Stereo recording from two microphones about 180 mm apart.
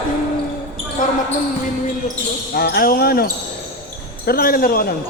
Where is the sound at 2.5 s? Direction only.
60° left (ahead or behind).